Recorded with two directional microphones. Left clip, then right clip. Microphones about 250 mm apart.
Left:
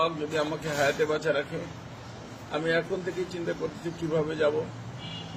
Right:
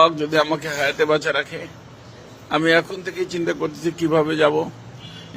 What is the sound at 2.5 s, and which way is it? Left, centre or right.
Speech, right.